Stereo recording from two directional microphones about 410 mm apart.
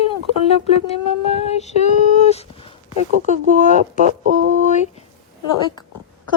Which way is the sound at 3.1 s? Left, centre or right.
Centre.